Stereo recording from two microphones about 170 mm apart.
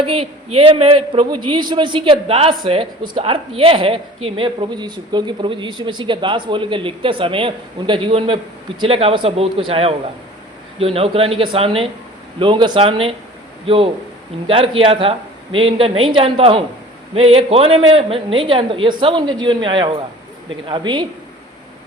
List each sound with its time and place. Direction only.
0.0 s a man's voice: 35° right (ahead or behind)